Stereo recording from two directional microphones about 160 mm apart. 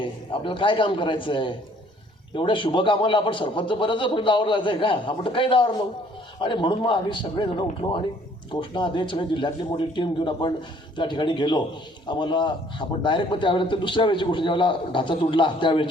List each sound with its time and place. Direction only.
0.0 s a man's voice: 30° left (ahead or behind)